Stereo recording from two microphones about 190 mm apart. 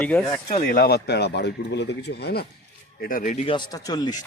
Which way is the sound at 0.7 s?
55° left (ahead or behind).